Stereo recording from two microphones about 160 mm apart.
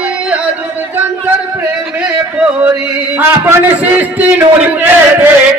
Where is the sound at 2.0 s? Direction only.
10° right (ahead or behind).